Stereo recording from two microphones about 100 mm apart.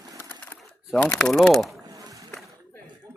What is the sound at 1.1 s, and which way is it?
Speech, centre (ahead or behind).